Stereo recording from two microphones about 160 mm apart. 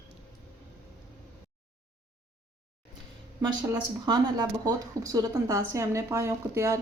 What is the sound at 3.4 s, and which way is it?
A woman's voice, 25° right (ahead or behind).